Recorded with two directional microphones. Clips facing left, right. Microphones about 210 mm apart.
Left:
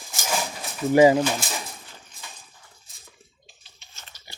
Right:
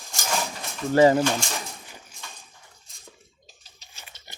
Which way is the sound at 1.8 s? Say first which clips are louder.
Right 2 dB; 15° right (ahead or behind).